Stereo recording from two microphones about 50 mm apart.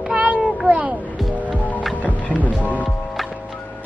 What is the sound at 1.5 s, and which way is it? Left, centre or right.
Music, left.